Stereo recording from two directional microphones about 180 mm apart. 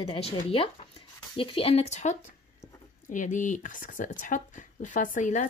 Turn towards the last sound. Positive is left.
turn(degrees=45)  # may be behind; listen again after turning